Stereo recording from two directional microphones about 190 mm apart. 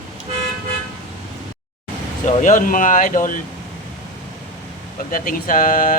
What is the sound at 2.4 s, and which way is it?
Speech, 45° left (ahead or behind).